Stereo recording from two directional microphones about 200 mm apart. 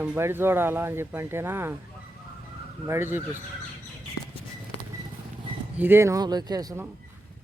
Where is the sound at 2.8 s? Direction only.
10° right (ahead or behind).